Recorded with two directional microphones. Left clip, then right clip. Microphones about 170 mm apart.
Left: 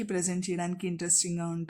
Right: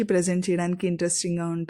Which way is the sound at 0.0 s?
30° right (ahead or behind).